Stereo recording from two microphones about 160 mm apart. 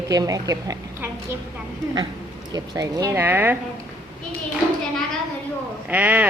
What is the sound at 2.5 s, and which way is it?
Speech, 20° right (ahead or behind).